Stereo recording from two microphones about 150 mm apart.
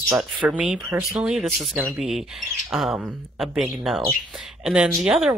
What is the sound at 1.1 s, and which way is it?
Speech, centre (ahead or behind).